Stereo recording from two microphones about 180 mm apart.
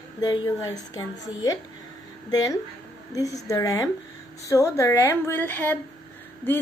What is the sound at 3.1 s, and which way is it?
Speech, 20° left (ahead or behind).